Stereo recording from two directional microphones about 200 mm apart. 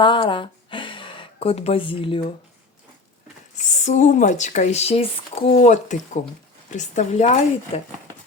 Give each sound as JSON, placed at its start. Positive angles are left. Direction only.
{"t": 0.0, "sound": "speech", "side_deg": 25}
{"t": 3.6, "sound": "speech", "side_deg": 35}